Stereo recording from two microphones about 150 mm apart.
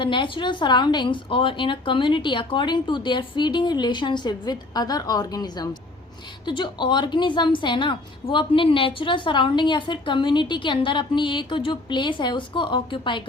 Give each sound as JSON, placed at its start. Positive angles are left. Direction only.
{"t": 0.0, "sound": "a woman's voice", "side_deg": 35}